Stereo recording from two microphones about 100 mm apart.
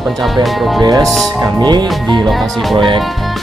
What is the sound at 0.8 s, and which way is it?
Speech, 40° right (ahead or behind).